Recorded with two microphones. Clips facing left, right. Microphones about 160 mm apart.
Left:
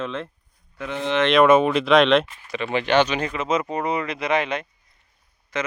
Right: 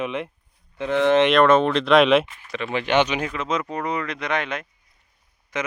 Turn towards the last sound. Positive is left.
turn(degrees=-15)  # may be behind; listen again after turning